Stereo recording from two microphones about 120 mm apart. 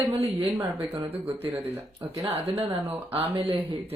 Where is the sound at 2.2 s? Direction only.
25° right (ahead or behind).